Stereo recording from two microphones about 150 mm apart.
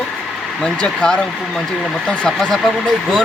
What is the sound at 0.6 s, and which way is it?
Speech, 5° left (ahead or behind).